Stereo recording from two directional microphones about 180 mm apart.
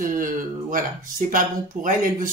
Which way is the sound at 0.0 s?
50° right (ahead or behind).